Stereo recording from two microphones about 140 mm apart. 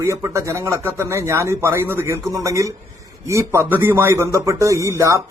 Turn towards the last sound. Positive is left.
turn(degrees=-20)  # may be behind; listen again after turning